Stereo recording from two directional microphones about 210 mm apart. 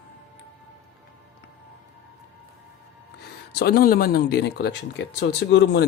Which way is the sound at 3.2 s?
50° left (ahead or behind).